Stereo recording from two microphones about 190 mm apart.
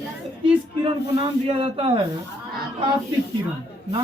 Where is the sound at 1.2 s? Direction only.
30° right (ahead or behind).